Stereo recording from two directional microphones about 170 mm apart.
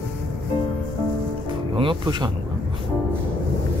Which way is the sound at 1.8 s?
30° right (ahead or behind).